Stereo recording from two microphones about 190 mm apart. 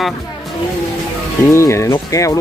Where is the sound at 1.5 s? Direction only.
15° left (ahead or behind).